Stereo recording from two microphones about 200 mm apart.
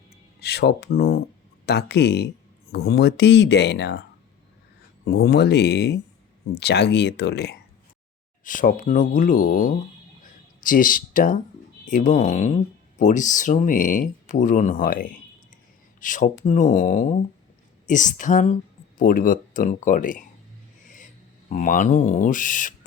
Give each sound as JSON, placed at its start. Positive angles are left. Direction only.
{"t": 0.3, "sound": "speech", "side_deg": 55}
{"t": 5.0, "sound": "speech", "side_deg": 55}
{"t": 8.4, "sound": "speech", "side_deg": 40}
{"t": 21.5, "sound": "speech", "side_deg": 40}